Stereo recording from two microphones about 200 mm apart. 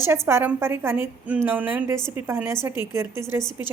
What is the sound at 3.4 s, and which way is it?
Speech, 20° left (ahead or behind).